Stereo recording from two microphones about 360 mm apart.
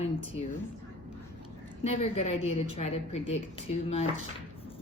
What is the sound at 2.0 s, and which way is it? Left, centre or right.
Speech, centre.